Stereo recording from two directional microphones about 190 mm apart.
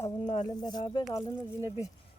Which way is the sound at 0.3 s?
25° left (ahead or behind).